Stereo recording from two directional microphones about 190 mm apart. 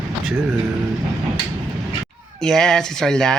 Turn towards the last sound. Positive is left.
turn(degrees=5)  # may be behind; listen again after turning